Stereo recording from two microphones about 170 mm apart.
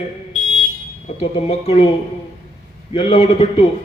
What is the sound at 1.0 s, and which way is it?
Speech, 40° left (ahead or behind).